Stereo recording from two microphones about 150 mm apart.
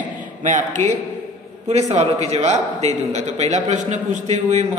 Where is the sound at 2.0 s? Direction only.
45° right (ahead or behind).